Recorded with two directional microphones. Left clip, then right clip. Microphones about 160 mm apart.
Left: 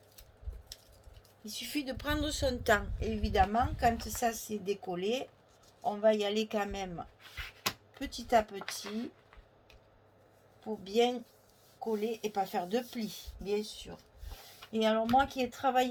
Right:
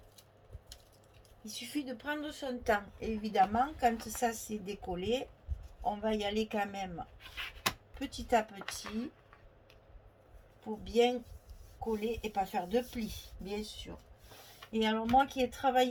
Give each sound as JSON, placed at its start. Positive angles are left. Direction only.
{"t": 1.5, "sound": "a woman's voice", "side_deg": 50}
{"t": 7.9, "sound": "speech", "side_deg": 40}
{"t": 10.8, "sound": "a woman's voice", "side_deg": 45}
{"t": 14.7, "sound": "a woman's voice", "side_deg": 45}